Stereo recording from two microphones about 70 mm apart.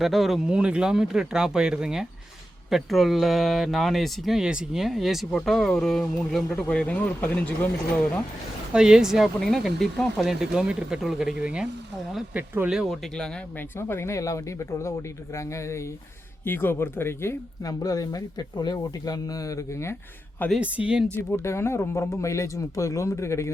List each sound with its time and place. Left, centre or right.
0.0 s speech: centre
6.5 s speech: centre
8.7 s speech: centre
12.3 s speech: right
12.6 s speech: centre
13.7 s speech: left
16.4 s speech: left
17.7 s speech: left
20.6 s speech: centre
21.4 s speech: left